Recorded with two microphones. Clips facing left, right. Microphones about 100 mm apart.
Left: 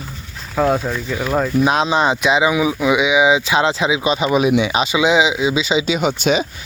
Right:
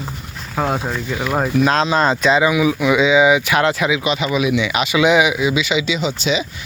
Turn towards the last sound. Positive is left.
turn(degrees=50)  # may be behind; listen again after turning